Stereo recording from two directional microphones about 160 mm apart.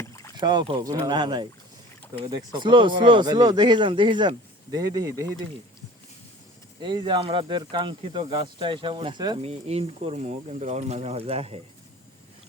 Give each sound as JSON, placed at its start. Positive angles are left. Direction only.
{"t": 0.3, "sound": "speech", "side_deg": -25}
{"t": 6.8, "sound": "speech", "side_deg": -30}